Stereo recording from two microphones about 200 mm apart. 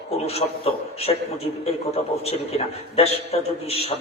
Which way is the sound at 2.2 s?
30° left (ahead or behind).